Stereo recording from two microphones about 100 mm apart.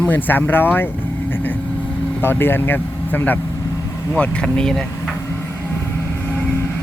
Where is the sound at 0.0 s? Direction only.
20° left (ahead or behind).